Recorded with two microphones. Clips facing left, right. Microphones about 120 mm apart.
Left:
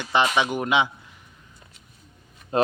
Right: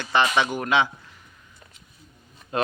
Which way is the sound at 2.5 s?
30° left (ahead or behind).